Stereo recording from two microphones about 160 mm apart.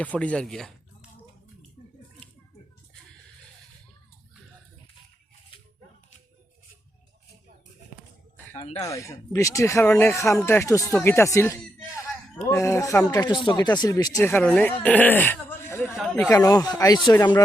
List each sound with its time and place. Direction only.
0.0 s speech: 10° left (ahead or behind)
8.5 s speech: 40° left (ahead or behind)
8.8 s speech: 20° left (ahead or behind)